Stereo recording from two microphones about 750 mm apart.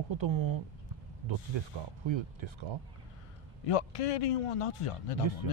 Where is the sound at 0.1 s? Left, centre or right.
Right.